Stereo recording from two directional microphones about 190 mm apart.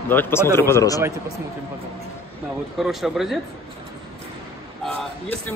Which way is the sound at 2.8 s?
Centre (ahead or behind).